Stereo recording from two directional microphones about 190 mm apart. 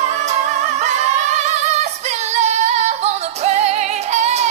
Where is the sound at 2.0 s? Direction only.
35° right (ahead or behind).